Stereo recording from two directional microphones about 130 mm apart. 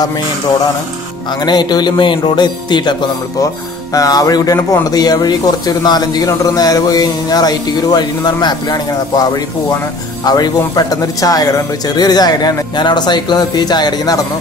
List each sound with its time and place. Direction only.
1.4 s a man's voice: 35° left (ahead or behind)